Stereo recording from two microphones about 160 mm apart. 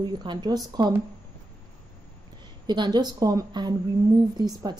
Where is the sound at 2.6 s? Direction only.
25° right (ahead or behind).